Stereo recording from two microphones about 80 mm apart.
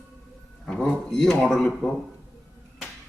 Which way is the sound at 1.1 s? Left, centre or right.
Centre.